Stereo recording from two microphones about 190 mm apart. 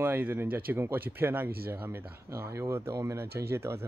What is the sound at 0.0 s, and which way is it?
Speech, 10° right (ahead or behind).